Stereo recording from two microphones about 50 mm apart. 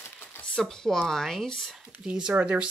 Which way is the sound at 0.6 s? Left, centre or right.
Centre.